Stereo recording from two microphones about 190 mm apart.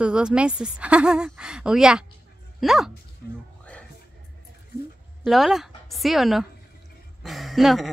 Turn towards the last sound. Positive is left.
turn(degrees=0)  # may be behind; listen again after turning